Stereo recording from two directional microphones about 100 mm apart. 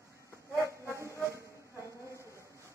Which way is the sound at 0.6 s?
30° right (ahead or behind).